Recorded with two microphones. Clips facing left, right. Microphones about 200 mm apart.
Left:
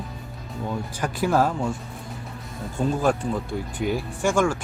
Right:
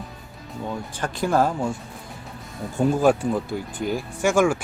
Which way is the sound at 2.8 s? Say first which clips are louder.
Right 4 dB; 10° right (ahead or behind).